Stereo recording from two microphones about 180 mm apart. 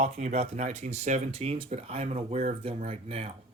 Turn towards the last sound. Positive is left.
turn(degrees=-35)  # may be behind; listen again after turning